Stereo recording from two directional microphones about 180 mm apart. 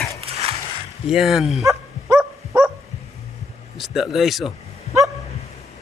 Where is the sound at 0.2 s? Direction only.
35° right (ahead or behind).